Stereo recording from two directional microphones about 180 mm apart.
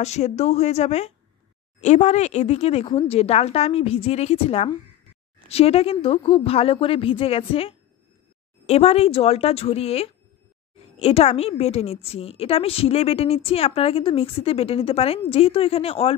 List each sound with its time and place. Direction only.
0.0 s a woman's voice: 40° left (ahead or behind)